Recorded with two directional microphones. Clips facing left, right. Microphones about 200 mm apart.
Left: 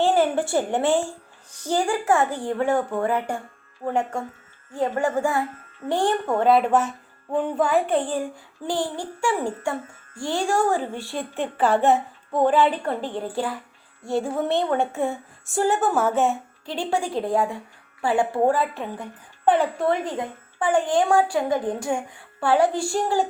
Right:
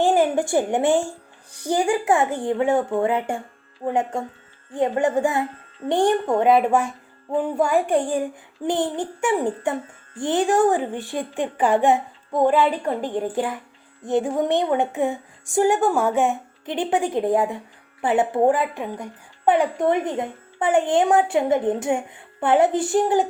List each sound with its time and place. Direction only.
0.0 s a woman's voice: 15° right (ahead or behind)